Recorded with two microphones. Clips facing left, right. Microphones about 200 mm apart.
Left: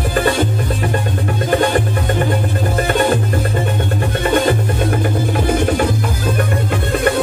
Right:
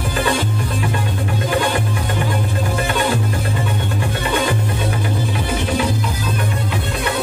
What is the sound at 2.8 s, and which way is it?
Music, 50° left (ahead or behind).